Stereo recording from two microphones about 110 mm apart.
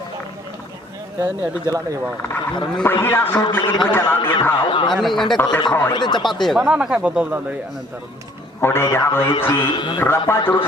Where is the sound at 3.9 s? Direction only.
20° left (ahead or behind).